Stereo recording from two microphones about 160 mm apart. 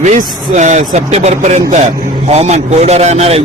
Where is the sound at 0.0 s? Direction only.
45° right (ahead or behind).